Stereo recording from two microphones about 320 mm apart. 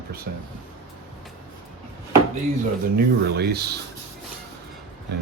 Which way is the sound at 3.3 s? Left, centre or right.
Right.